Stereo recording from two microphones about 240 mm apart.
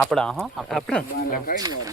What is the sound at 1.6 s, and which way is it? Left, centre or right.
Speech, centre.